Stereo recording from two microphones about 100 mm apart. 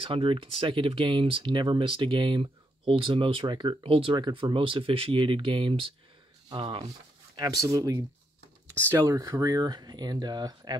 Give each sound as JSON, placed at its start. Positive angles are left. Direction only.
{"t": 0.0, "sound": "speech", "side_deg": -60}
{"t": 4.2, "sound": "speech", "side_deg": -50}
{"t": 7.3, "sound": "speech", "side_deg": -40}